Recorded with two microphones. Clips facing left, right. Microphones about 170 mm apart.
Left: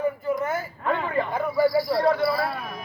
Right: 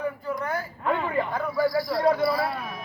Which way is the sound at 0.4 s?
Centre (ahead or behind).